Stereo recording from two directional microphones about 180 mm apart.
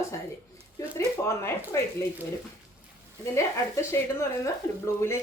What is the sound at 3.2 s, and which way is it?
A woman's voice, 15° left (ahead or behind).